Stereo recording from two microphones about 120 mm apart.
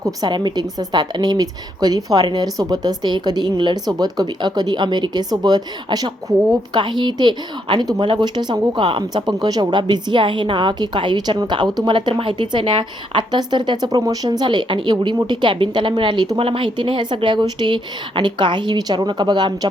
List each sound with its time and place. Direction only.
0.0 s a woman's voice: 35° right (ahead or behind)